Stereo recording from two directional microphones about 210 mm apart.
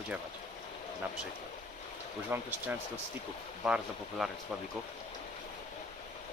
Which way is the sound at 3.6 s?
5° right (ahead or behind).